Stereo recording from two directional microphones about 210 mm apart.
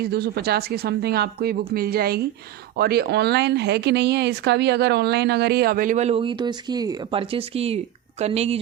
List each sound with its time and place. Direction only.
0.0 s speech: 50° right (ahead or behind); by 8.5 s 30° right (ahead or behind)